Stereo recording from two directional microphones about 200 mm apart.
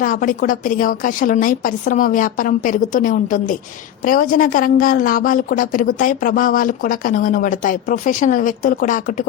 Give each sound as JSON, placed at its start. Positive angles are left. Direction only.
{"t": 0.0, "sound": "a woman's voice", "side_deg": 45}